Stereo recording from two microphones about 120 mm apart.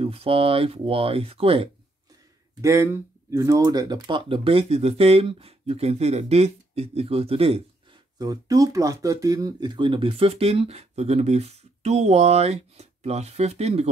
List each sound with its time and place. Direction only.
0.0 s speech: 55° right (ahead or behind)
2.6 s speech: 25° right (ahead or behind); by 7.6 s 55° right (ahead or behind)
8.2 s speech: 30° right (ahead or behind); by 13.8 s 60° right (ahead or behind)